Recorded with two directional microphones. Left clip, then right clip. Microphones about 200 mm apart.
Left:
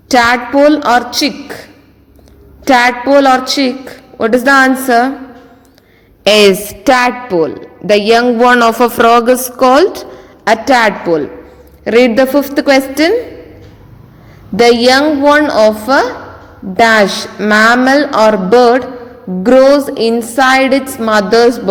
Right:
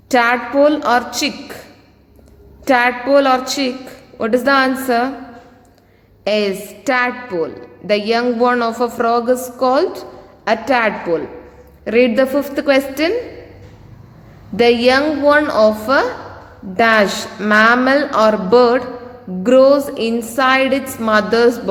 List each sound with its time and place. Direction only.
0.1 s a woman's voice: 25° left (ahead or behind)
2.6 s a woman's voice: 25° left (ahead or behind)
6.2 s a woman's voice: 45° left (ahead or behind)
6.8 s a man's voice: 30° left (ahead or behind)
14.5 s a woman's voice: 20° left (ahead or behind)